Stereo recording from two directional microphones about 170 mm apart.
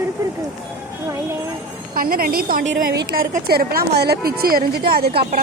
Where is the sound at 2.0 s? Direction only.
60° right (ahead or behind).